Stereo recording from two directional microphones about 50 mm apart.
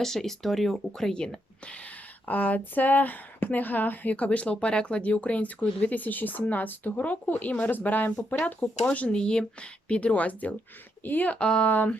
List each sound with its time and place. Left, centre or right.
0.0 s speech: centre; by 8.7 s left
8.8 s speech: left
11.3 s speech: centre
11.7 s speech: left